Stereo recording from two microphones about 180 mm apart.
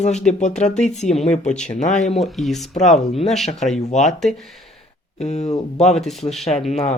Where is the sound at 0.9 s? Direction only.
40° left (ahead or behind).